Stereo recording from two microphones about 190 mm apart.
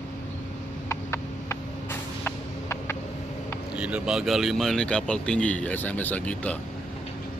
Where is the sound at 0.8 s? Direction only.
15° left (ahead or behind).